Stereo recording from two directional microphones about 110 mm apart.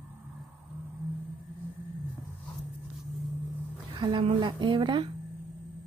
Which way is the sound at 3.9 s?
45° right (ahead or behind).